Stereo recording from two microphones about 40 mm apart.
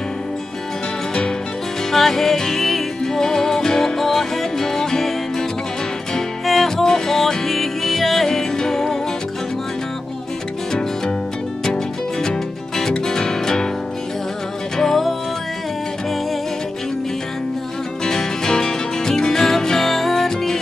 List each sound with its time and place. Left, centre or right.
1.9 s music: centre
6.1 s music: centre
11.6 s music: centre
14.8 s music: centre
18.0 s music: centre